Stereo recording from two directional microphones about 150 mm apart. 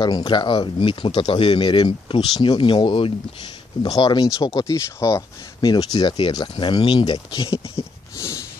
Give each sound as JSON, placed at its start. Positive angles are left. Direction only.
{"t": 0.0, "sound": "speech", "side_deg": 30}